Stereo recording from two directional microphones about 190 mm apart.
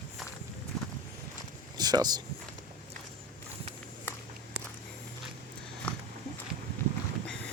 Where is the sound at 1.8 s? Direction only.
20° right (ahead or behind).